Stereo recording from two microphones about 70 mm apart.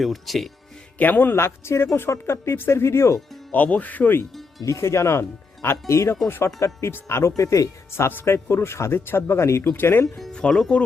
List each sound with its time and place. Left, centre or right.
0.0 s speech: centre
0.9 s speech: left
3.5 s speech: left
4.6 s speech: left
9.6 s speech: left
10.3 s speech: centre